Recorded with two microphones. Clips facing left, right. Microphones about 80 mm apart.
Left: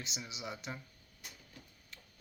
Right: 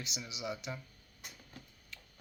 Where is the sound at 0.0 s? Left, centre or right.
Left.